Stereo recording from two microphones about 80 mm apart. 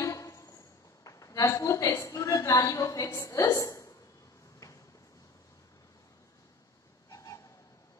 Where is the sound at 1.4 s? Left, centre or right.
Left.